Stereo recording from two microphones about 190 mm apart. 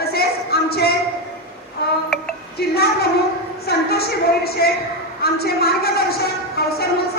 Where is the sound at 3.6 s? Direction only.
55° left (ahead or behind).